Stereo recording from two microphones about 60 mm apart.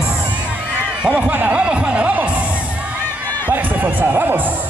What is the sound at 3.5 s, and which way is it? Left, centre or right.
Speech, right.